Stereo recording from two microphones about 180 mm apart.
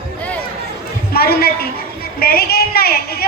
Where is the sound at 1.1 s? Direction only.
60° left (ahead or behind).